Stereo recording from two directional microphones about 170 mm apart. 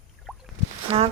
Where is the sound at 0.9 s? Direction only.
35° right (ahead or behind).